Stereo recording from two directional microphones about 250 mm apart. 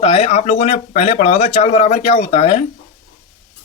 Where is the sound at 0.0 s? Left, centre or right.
Left.